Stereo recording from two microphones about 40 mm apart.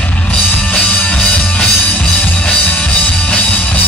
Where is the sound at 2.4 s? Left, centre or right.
Left.